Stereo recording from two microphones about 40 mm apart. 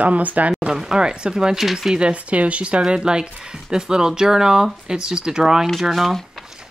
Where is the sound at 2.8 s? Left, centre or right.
Right.